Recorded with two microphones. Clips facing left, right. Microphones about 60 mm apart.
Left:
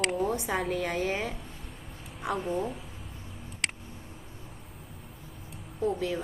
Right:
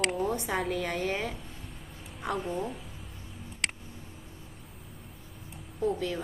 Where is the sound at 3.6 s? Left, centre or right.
Centre.